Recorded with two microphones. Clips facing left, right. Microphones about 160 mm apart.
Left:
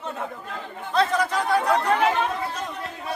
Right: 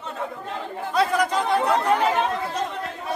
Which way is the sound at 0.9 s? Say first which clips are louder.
Right 1 dB; 15° right (ahead or behind).